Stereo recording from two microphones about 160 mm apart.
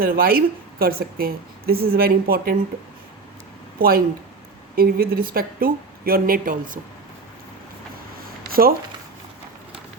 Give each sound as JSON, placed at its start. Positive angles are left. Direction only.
{"t": 0.0, "sound": "speech", "side_deg": -65}
{"t": 3.8, "sound": "speech", "side_deg": -65}